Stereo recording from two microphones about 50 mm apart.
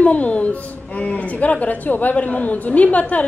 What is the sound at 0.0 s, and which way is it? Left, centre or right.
A woman's voice, left.